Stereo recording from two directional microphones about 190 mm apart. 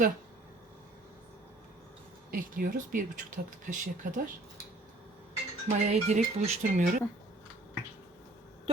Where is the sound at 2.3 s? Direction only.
45° right (ahead or behind).